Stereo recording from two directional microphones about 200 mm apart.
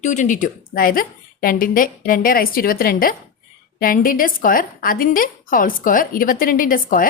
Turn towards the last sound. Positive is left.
turn(degrees=45)  # may be behind; listen again after turning